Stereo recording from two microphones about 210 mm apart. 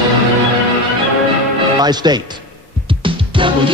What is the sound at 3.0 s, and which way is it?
Music, 25° right (ahead or behind).